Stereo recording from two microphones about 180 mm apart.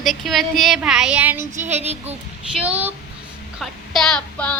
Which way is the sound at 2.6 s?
10° right (ahead or behind).